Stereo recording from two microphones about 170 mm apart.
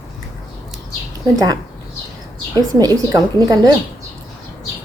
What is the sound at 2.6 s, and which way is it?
A woman's voice, 20° right (ahead or behind).